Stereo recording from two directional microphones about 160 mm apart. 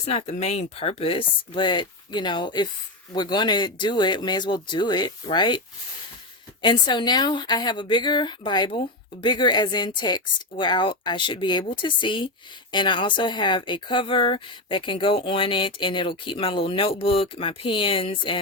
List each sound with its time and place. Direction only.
0.1 s speech: 40° left (ahead or behind)